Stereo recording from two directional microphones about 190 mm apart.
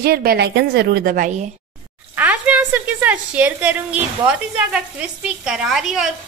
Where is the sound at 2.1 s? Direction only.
10° right (ahead or behind).